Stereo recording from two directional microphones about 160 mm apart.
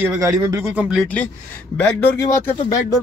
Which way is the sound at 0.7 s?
5° right (ahead or behind).